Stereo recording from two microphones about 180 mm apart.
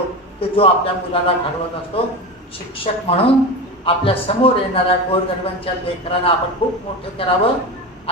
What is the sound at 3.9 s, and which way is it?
A woman's voice, 30° left (ahead or behind).